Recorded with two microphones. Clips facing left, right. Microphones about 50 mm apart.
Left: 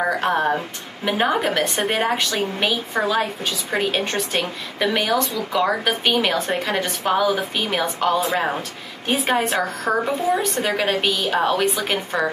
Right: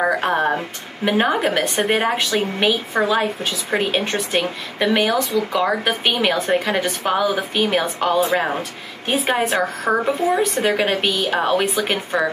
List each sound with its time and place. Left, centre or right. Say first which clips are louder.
0.0 s a woman's voice: right 2 dB; centre